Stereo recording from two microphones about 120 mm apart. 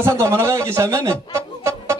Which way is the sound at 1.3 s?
25° right (ahead or behind).